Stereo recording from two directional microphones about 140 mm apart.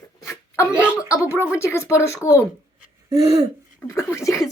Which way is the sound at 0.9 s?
20° left (ahead or behind).